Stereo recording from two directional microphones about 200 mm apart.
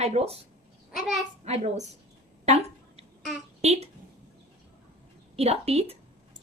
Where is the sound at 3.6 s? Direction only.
30° right (ahead or behind).